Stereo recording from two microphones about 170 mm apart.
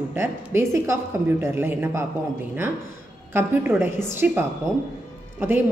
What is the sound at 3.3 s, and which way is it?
A woman's voice, 15° right (ahead or behind).